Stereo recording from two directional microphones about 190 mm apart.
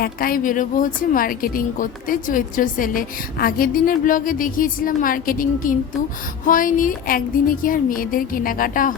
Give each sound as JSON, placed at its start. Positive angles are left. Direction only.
{"t": 0.0, "sound": "a woman's voice", "side_deg": 50}